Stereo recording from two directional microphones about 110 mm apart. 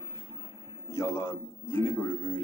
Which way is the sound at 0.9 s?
25° left (ahead or behind).